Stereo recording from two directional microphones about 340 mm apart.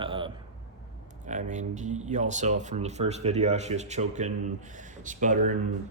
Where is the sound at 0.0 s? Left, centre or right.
Centre.